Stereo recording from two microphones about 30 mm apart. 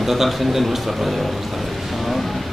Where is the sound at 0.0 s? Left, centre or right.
Centre.